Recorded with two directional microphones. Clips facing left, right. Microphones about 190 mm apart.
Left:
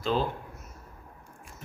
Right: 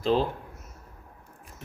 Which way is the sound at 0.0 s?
35° right (ahead or behind).